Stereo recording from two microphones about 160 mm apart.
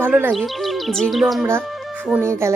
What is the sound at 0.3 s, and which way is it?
Speech, centre (ahead or behind).